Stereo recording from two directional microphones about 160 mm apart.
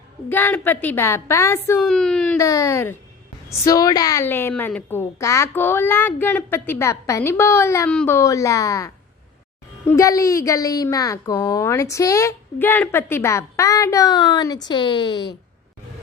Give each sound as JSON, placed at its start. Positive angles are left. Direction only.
{"t": 0.3, "sound": "a woman's voice", "side_deg": 10}
{"t": 1.8, "sound": "speech", "side_deg": 5}
{"t": 2.4, "sound": "a woman's voice", "side_deg": 20}